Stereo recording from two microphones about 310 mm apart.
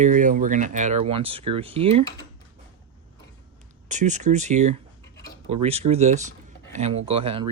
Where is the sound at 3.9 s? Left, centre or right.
Right.